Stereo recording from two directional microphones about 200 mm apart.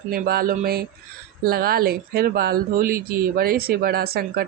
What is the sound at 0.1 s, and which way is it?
Speech, 50° right (ahead or behind).